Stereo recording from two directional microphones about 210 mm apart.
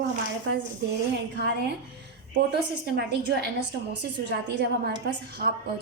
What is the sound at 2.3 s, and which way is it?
A woman's voice, 50° right (ahead or behind).